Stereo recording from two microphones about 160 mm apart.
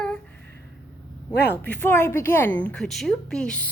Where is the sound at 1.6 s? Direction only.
10° left (ahead or behind).